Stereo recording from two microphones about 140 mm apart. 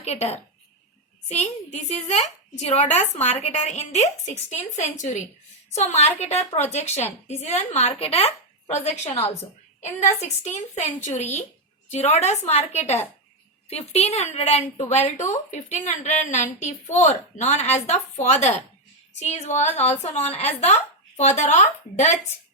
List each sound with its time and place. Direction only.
0.0 s a woman's voice: 50° left (ahead or behind)